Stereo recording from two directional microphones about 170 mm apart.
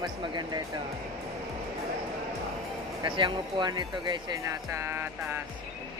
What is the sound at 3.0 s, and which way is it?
Speech, 30° right (ahead or behind).